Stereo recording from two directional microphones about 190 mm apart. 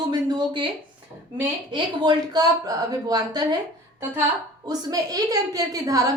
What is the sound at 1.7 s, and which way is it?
A woman's voice, 25° right (ahead or behind).